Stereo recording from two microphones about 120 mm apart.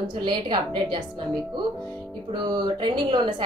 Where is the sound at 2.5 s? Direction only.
40° right (ahead or behind).